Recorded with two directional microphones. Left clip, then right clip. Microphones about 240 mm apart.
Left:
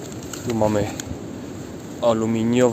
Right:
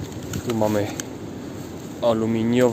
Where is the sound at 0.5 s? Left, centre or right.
Centre.